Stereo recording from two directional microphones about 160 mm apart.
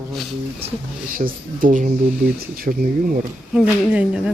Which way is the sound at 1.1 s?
60° right (ahead or behind).